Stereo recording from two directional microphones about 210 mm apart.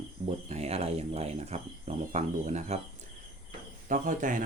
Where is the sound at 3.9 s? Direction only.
40° right (ahead or behind).